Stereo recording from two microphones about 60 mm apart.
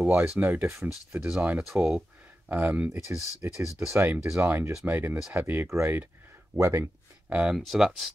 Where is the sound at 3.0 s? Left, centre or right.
Right.